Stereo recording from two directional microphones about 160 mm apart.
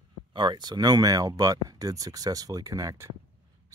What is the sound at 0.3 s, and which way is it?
Speech, 30° right (ahead or behind).